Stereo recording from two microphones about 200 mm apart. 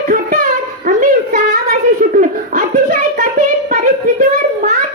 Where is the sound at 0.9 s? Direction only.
45° right (ahead or behind).